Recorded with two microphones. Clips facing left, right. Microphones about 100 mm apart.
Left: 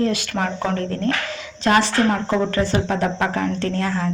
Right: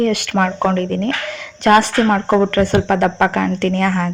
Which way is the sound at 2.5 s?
60° right (ahead or behind).